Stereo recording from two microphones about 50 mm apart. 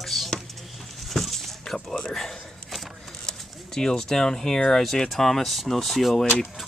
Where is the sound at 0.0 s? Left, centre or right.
Centre.